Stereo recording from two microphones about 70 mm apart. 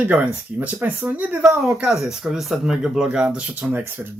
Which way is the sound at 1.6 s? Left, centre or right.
Centre.